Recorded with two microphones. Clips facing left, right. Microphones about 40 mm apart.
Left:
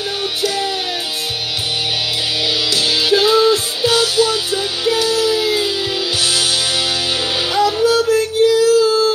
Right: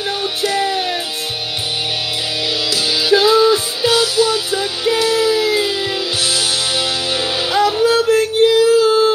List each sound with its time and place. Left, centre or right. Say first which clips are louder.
0.4 s music: right 2 dB; centre
2.9 s music: right 2 dB; centre
7.5 s music: right 1 dB; centre
8.5 s a sound: even; centre